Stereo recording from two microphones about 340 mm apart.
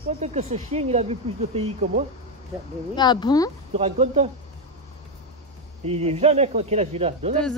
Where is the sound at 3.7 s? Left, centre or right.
Centre.